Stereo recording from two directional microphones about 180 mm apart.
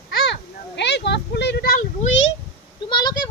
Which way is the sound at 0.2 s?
70° left (ahead or behind).